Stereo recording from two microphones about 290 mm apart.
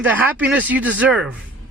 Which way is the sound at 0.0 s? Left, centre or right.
Centre.